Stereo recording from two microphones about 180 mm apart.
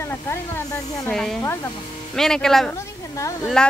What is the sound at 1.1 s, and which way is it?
Speech, 5° left (ahead or behind).